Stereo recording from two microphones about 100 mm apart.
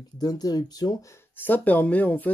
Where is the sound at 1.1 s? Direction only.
20° left (ahead or behind).